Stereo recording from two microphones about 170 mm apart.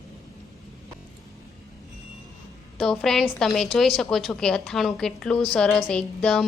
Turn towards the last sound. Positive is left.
turn(degrees=5)  # may be behind; listen again after turning